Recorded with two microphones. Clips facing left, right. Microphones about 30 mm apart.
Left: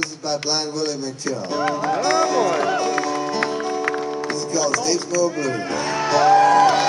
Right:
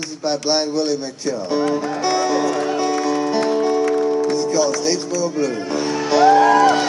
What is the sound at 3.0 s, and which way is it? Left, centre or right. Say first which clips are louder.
Music: right 4 dB; centre.